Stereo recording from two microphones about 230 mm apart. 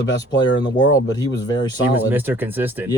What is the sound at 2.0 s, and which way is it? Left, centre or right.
Speech, centre.